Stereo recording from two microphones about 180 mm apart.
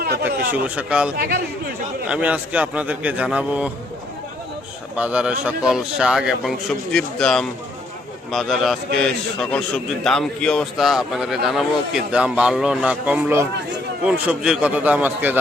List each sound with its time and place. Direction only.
0.3 s a man's voice: 10° right (ahead or behind)
1.1 s speech: 60° right (ahead or behind)
2.0 s a man's voice: 5° right (ahead or behind)
4.9 s a man's voice: 5° right (ahead or behind)